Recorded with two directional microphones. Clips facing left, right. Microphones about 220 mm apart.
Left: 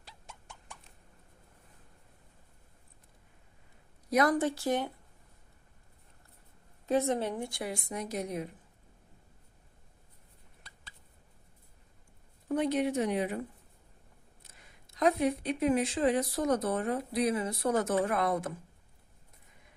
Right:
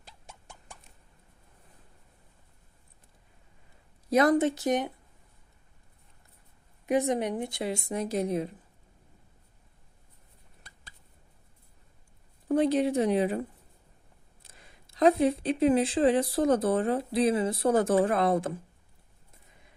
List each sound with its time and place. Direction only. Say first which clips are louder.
4.1 s speech: right 4 dB; 25° right (ahead or behind)
6.8 s speech: right 3 dB; 15° right (ahead or behind)
12.5 s speech: right 5 dB; 30° right (ahead or behind)
14.4 s speech: right 5 dB; 30° right (ahead or behind)